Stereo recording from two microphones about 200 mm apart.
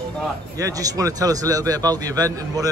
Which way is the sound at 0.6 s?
15° right (ahead or behind).